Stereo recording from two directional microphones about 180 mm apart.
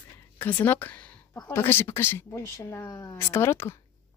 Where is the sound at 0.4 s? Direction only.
10° left (ahead or behind).